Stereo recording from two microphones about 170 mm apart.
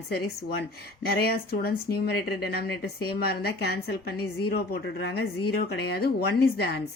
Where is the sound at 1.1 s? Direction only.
65° left (ahead or behind).